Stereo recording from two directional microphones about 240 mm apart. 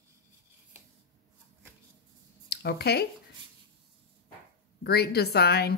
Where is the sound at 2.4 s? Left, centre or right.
Left.